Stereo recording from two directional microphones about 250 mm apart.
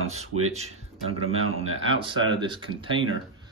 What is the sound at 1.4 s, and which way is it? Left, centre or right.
Speech, right.